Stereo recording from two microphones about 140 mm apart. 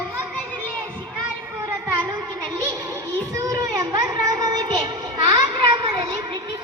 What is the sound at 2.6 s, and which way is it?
Speech, 20° right (ahead or behind).